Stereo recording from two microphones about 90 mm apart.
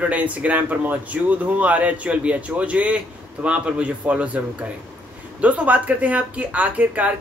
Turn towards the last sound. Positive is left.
turn(degrees=-15)  # may be behind; listen again after turning